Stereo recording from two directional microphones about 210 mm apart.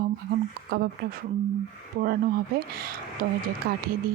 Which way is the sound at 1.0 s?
50° right (ahead or behind).